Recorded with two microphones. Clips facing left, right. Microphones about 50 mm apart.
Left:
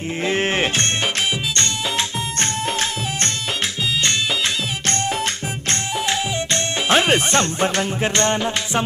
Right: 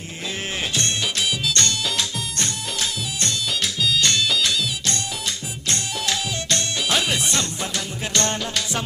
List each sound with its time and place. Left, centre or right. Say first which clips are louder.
0.3 s music: left 8 dB; left
1.5 s music: left 1 dB; left
2.4 s music: left 6 dB; left
4.0 s music: even; left
4.9 s music: left 6 dB; left
6.1 s speech: left 2 dB; left